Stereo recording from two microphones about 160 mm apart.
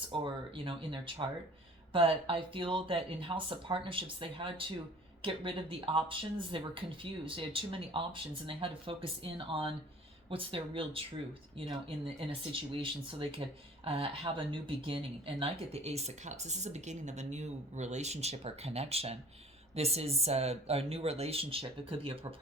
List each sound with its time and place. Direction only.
0.1 s speech: 35° right (ahead or behind)
12.3 s speech: 35° right (ahead or behind)